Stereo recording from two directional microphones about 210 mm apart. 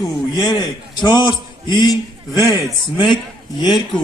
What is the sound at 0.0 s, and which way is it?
A man's voice, 20° left (ahead or behind).